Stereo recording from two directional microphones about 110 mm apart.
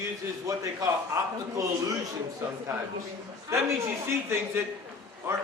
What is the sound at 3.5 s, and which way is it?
Speech, 25° right (ahead or behind).